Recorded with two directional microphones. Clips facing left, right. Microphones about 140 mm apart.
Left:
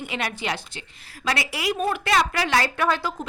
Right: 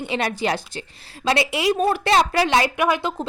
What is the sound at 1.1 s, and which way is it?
A woman's voice, 25° right (ahead or behind).